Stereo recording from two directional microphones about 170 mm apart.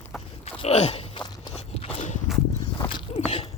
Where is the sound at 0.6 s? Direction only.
40° left (ahead or behind).